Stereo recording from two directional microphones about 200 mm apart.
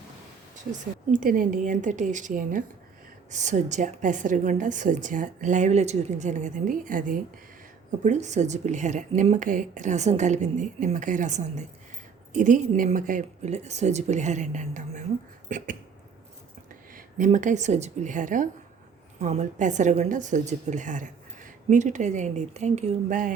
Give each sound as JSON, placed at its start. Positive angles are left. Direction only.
{"t": 0.7, "sound": "a woman's voice", "side_deg": -40}
{"t": 15.4, "sound": "a sound", "side_deg": -40}
{"t": 16.9, "sound": "a woman's voice", "side_deg": -40}